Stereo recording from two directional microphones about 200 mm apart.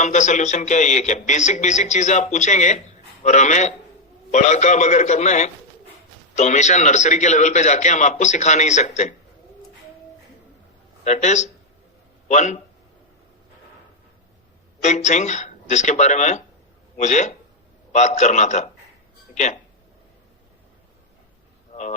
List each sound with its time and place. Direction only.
0.0 s speech: 35° left (ahead or behind)
11.0 s speech: 35° left (ahead or behind)
14.8 s speech: 35° left (ahead or behind)
21.7 s a sound: 35° left (ahead or behind)